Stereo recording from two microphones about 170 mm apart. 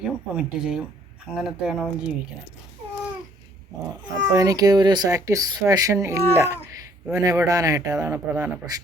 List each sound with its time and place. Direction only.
0.0 s speech: 5° right (ahead or behind)
4.0 s speech: 20° right (ahead or behind)